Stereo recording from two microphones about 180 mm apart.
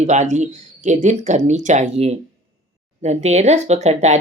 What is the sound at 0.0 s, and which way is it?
Speech, 40° right (ahead or behind).